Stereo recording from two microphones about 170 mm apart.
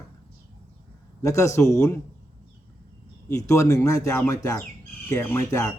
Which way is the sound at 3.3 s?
20° left (ahead or behind).